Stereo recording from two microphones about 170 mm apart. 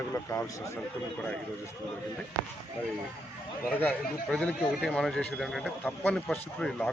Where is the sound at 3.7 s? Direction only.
10° left (ahead or behind).